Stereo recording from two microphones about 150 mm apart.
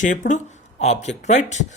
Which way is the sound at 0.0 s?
60° left (ahead or behind).